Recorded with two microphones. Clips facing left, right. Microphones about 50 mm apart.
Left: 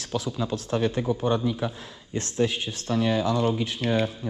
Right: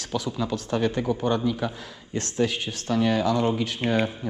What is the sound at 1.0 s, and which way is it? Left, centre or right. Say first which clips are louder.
Speech: even; right.